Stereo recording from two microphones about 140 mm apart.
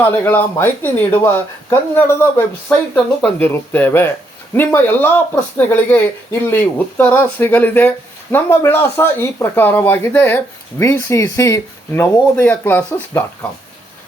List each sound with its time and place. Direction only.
0.0 s speech: 15° left (ahead or behind)